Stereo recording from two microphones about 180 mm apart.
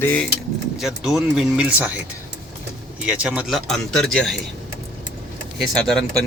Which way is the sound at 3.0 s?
5° right (ahead or behind).